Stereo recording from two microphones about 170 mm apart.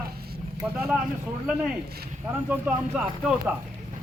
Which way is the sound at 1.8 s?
65° right (ahead or behind).